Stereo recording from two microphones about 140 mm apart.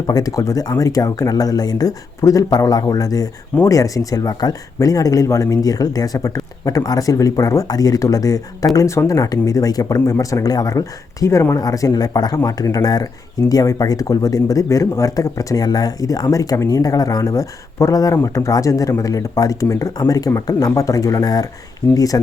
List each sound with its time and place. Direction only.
0.1 s speech: 25° left (ahead or behind)